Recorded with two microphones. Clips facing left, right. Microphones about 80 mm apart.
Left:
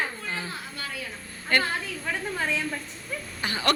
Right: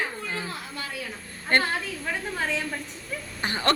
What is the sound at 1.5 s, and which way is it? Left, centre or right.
Speech, right.